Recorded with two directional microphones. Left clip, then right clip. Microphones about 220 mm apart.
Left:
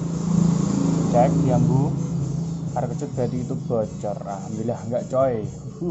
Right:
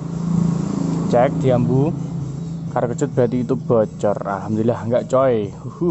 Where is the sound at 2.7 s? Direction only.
45° right (ahead or behind).